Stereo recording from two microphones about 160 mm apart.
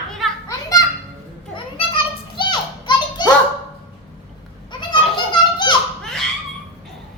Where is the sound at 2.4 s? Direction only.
30° left (ahead or behind).